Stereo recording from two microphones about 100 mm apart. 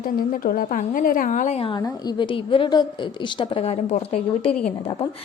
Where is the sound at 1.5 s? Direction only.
70° left (ahead or behind).